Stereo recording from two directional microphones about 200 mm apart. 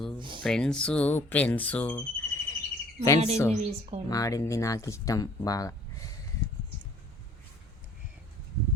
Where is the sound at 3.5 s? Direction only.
30° right (ahead or behind).